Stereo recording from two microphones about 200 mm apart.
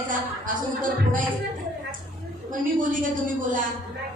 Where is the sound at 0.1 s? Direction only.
40° right (ahead or behind).